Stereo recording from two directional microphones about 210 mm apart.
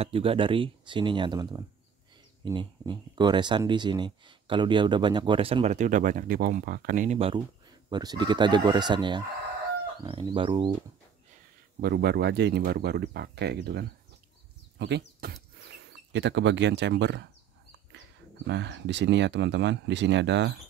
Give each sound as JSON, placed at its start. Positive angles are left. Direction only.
{"t": 0.0, "sound": "speech", "side_deg": -25}
{"t": 7.2, "sound": "speech", "side_deg": -25}
{"t": 11.8, "sound": "speech", "side_deg": -50}
{"t": 18.5, "sound": "speech", "side_deg": -55}